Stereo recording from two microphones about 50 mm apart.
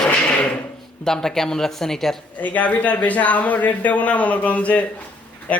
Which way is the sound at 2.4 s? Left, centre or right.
Left.